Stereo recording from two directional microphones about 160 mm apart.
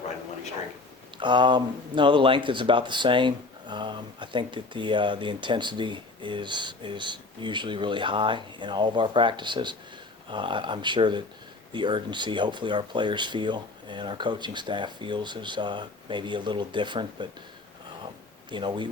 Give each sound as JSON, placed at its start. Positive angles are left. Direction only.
{"t": 1.2, "sound": "speech", "side_deg": -30}
{"t": 18.5, "sound": "speech", "side_deg": -30}